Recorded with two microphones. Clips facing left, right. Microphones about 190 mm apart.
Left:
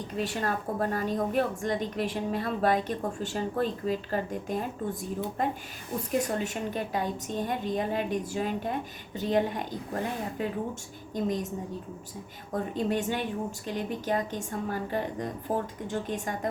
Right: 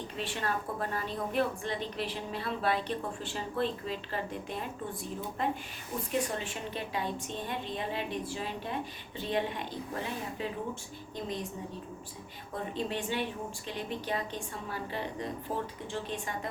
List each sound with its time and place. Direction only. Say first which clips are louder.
0.2 s a woman's voice: left 4 dB; 40° left (ahead or behind)
12.7 s a woman's voice: left 4 dB; 45° left (ahead or behind)